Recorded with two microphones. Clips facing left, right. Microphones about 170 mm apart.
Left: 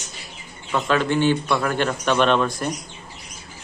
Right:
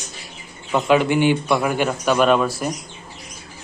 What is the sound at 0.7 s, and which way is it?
A man's voice, 15° right (ahead or behind).